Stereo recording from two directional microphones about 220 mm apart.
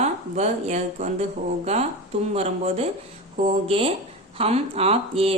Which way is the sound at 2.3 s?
30° right (ahead or behind).